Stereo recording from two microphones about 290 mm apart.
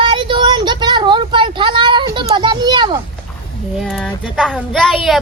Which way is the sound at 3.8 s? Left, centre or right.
Centre.